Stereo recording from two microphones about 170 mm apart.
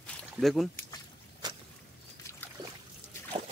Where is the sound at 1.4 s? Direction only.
25° right (ahead or behind).